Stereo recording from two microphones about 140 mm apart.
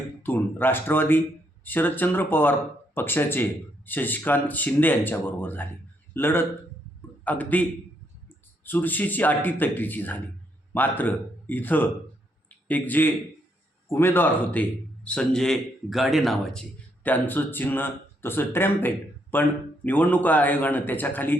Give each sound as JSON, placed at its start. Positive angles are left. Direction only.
{"t": 0.2, "sound": "a man's voice", "side_deg": 15}
{"t": 12.5, "sound": "a sound", "side_deg": 10}
{"t": 13.8, "sound": "a man's voice", "side_deg": 15}